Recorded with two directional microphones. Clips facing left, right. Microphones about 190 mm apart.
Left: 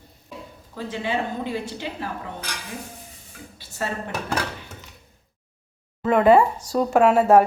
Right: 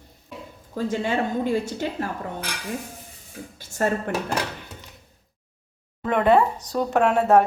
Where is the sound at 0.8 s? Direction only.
45° right (ahead or behind).